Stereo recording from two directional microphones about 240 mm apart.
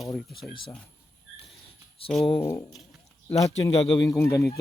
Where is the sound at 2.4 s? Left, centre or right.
Centre.